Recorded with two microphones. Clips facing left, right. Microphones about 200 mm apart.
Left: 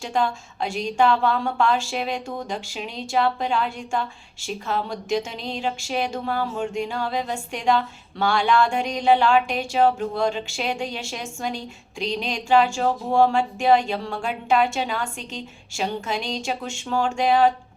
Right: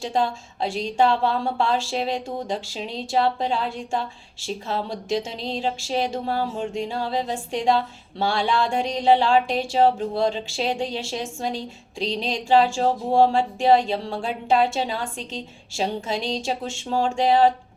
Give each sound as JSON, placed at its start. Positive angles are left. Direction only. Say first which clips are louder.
{"t": 0.0, "sound": "a woman's voice", "louder": "even", "side_deg": -30}